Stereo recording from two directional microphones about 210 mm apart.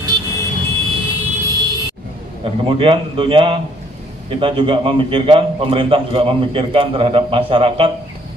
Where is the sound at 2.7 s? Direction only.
25° right (ahead or behind).